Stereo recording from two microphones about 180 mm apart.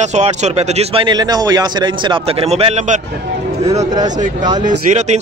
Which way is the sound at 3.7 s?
20° right (ahead or behind).